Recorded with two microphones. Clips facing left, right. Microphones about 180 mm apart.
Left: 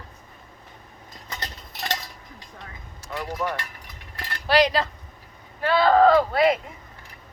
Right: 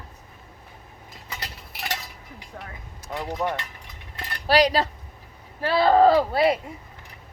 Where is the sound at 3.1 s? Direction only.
20° right (ahead or behind).